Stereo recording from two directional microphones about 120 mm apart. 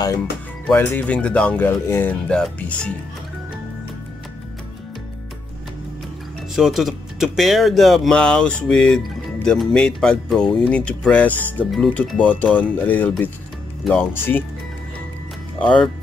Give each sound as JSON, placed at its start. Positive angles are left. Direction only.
{"t": 0.7, "sound": "speech", "side_deg": 15}
{"t": 6.5, "sound": "speech", "side_deg": 0}